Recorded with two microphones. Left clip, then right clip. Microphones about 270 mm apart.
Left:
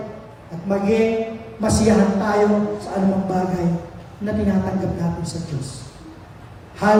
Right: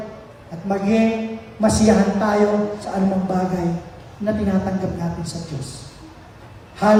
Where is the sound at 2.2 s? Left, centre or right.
Right.